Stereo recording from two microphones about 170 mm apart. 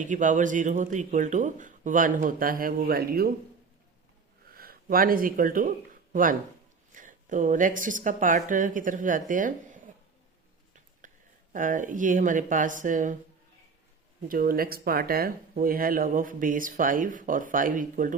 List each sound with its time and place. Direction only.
0.0 s speech: 50° right (ahead or behind)
4.5 s speech: 60° right (ahead or behind)
6.9 s speech: 50° right (ahead or behind)
11.0 s a sound: 50° right (ahead or behind)
11.5 s speech: 50° right (ahead or behind)
14.3 s speech: 55° right (ahead or behind)